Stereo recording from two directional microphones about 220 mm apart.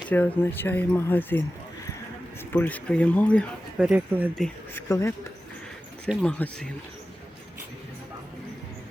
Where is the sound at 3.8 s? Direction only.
5° right (ahead or behind).